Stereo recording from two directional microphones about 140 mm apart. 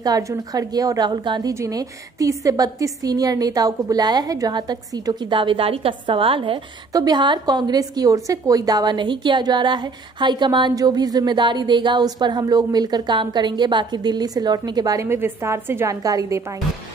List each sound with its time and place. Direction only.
0.0 s a woman's voice: 25° right (ahead or behind)
1.5 s a woman's voice: 25° right (ahead or behind); by 6.6 s 40° right (ahead or behind)
6.9 s a woman's voice: 25° right (ahead or behind)